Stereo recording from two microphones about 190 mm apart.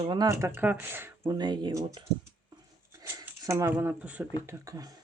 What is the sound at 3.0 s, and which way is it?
Speech, 15° right (ahead or behind).